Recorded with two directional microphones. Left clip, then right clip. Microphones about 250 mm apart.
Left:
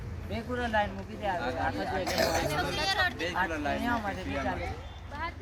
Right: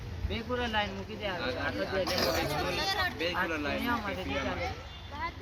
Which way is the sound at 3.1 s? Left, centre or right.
Left.